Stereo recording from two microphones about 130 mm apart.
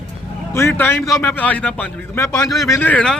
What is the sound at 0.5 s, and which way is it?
A man's voice, 15° left (ahead or behind).